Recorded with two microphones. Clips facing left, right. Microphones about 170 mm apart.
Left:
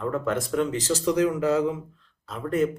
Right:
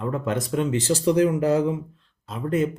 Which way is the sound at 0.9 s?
35° right (ahead or behind).